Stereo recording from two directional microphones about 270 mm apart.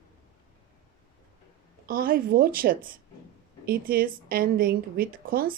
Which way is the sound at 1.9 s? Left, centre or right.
Right.